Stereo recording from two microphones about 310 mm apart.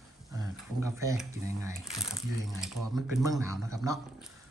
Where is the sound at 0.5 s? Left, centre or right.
Centre.